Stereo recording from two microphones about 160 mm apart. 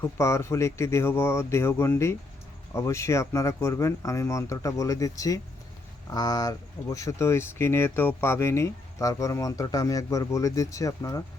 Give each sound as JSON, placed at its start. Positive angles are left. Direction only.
{"t": 0.0, "sound": "speech", "side_deg": 15}